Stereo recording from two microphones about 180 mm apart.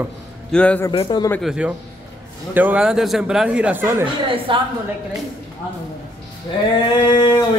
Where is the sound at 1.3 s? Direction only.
5° right (ahead or behind).